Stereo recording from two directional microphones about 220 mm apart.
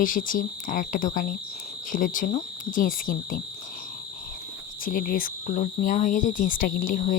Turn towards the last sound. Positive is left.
turn(degrees=40)  # may be behind; listen again after turning